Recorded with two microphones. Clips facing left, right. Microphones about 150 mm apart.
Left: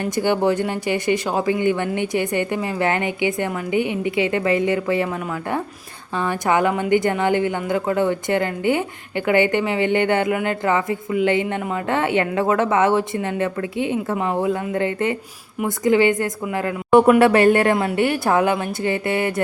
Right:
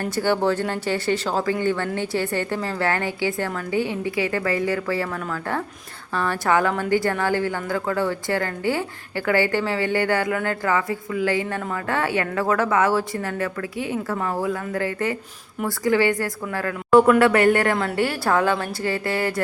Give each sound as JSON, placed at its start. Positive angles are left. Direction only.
{"t": 0.2, "sound": "a woman's voice", "side_deg": 15}
{"t": 6.1, "sound": "a woman's voice", "side_deg": 15}